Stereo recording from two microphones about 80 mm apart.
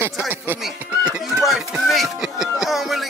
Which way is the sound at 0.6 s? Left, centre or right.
Centre.